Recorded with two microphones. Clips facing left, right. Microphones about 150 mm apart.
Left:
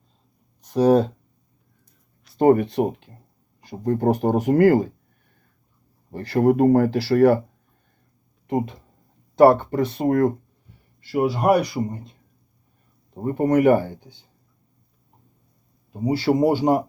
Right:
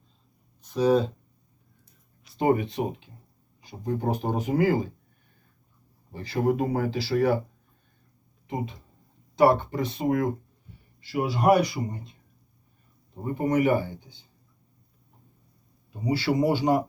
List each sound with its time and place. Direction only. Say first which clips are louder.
0.6 s speech: left 5 dB; 70° left (ahead or behind)
2.4 s speech: left 7 dB; 55° left (ahead or behind)
6.1 s speech: left 7 dB; 65° left (ahead or behind)
8.4 s a man's voice: left 8 dB; 60° left (ahead or behind)
13.2 s speech: left 6 dB; 55° left (ahead or behind)
15.9 s a man's voice: left 5 dB; 45° left (ahead or behind)